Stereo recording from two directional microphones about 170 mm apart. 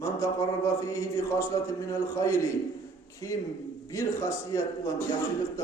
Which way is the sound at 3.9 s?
15° left (ahead or behind).